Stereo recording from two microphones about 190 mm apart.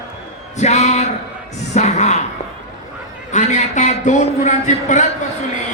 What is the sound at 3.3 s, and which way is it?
A man's voice, 40° left (ahead or behind).